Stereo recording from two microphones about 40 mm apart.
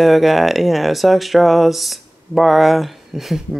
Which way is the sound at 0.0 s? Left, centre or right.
Centre.